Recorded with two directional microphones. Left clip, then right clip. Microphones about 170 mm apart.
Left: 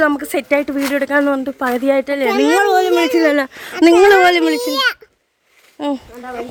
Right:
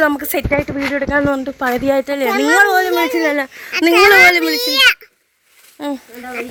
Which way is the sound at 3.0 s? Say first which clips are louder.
Left 2 dB; 65° left (ahead or behind).